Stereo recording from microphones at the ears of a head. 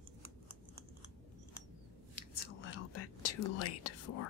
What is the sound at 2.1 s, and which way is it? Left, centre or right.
Whispering, left.